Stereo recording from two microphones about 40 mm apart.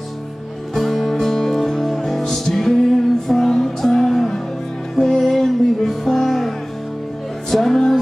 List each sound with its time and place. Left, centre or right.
0.7 s music: centre
7.5 s music: centre